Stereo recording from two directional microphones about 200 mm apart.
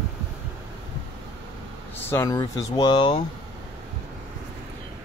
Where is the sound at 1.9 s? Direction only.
10° left (ahead or behind).